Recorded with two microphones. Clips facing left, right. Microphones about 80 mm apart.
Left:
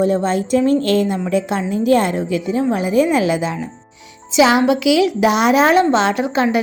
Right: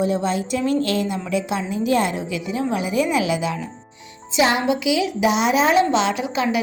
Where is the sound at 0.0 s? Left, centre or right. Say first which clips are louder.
Left 5 dB; left.